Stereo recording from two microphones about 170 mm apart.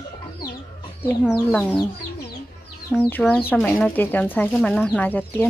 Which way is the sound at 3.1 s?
10° left (ahead or behind).